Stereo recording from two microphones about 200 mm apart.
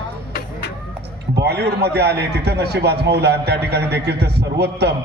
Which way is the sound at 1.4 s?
55° right (ahead or behind).